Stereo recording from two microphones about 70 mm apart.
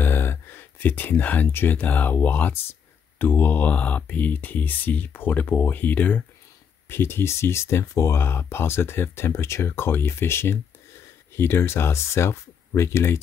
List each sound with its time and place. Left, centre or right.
0.0 s speech: left
6.9 s speech: left